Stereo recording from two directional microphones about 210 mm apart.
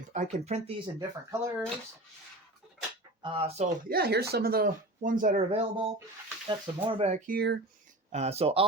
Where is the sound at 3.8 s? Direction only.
50° right (ahead or behind).